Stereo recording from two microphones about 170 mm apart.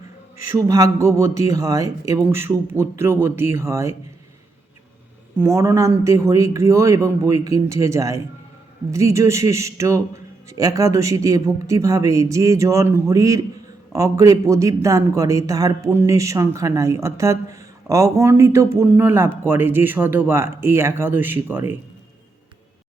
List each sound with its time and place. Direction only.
0.5 s speech: 20° right (ahead or behind)
5.4 s speech: 15° right (ahead or behind)